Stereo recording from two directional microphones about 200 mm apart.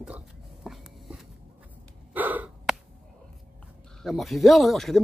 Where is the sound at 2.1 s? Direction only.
10° right (ahead or behind).